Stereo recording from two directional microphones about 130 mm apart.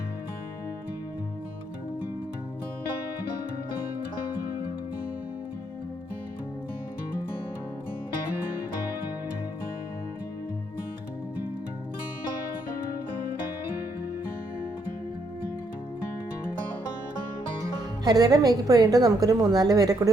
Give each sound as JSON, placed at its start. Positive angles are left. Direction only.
{"t": 18.0, "sound": "a woman's voice", "side_deg": -30}